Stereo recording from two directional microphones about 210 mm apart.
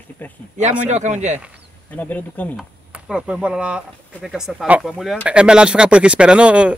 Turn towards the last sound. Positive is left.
turn(degrees=-5)  # may be behind; listen again after turning